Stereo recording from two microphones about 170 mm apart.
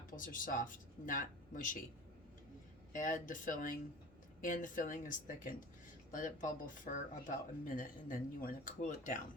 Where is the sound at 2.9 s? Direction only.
50° left (ahead or behind).